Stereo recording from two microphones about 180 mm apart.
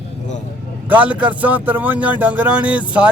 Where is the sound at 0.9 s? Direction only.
10° right (ahead or behind).